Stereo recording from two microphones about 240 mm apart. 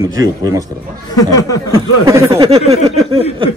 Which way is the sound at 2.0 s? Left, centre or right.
Centre.